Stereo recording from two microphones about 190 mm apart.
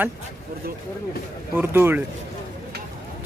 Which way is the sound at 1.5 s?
10° right (ahead or behind).